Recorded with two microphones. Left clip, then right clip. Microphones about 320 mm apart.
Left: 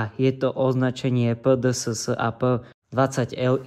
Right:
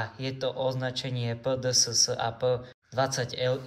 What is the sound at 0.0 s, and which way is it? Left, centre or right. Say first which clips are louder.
Speech: left 9 dB; centre.